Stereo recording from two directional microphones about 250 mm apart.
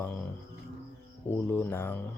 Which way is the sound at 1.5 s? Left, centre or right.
Centre.